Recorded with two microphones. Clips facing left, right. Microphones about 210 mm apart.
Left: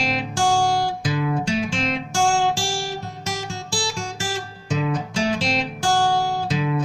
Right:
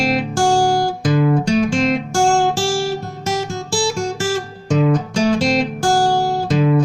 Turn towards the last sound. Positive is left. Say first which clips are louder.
# right 7 dB
turn(degrees=-50)  # may be behind; listen again after turning